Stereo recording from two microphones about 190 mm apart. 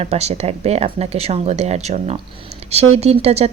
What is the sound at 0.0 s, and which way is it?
Speech, 35° right (ahead or behind).